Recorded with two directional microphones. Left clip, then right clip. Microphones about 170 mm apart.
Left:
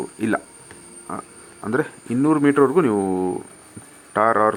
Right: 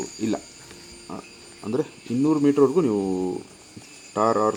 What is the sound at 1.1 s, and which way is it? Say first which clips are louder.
Speech: left 7 dB; 25° left (ahead or behind).